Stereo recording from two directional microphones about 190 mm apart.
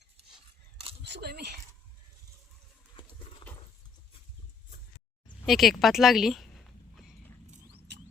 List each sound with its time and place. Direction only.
1.0 s speech: 60° right (ahead or behind)
5.5 s a woman's voice: centre (ahead or behind)
7.9 s a sound: 65° right (ahead or behind)